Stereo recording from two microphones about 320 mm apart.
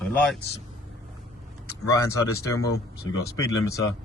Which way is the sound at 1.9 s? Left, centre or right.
Centre.